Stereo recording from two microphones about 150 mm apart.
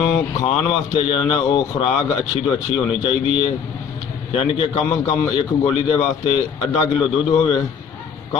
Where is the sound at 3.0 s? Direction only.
35° left (ahead or behind).